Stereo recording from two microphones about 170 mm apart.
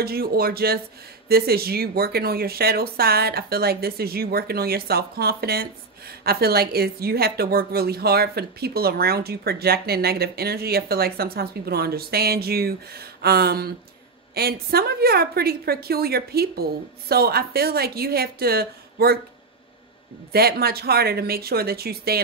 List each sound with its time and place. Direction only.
0.0 s speech: 65° right (ahead or behind)
20.3 s speech: 65° right (ahead or behind)